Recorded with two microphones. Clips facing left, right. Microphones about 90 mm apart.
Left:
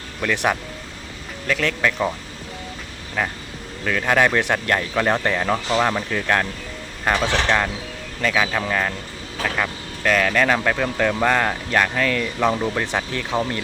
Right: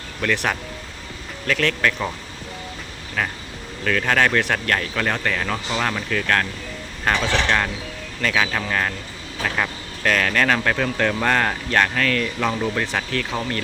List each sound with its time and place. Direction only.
0.2 s speech: 15° left (ahead or behind)
3.2 s speech: 10° left (ahead or behind)
7.0 s mechanisms: 10° left (ahead or behind)
8.2 s speech: 10° left (ahead or behind)